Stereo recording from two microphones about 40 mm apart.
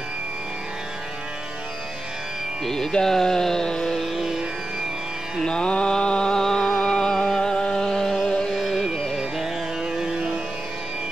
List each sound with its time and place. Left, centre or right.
2.6 s music: centre
4.0 s music: centre
5.4 s mantra: centre
6.3 s music: centre
8.5 s carnatic music: centre
9.1 s music: centre